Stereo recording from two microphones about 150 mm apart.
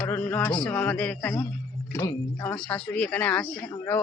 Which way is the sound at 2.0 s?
20° left (ahead or behind).